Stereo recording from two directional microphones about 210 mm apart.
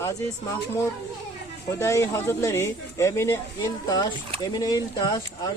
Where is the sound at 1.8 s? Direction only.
15° left (ahead or behind).